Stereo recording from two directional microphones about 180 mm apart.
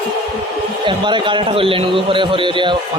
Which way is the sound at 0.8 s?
25° right (ahead or behind).